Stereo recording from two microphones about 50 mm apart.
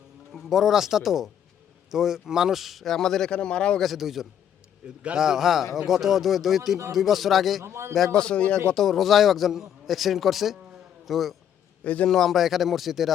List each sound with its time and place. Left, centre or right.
0.3 s a man's voice: centre
3.8 s a man's voice: centre
7.6 s a man's voice: right
8.1 s speech: centre
8.7 s a man's voice: centre
11.8 s a man's voice: left
12.0 s a man's voice: centre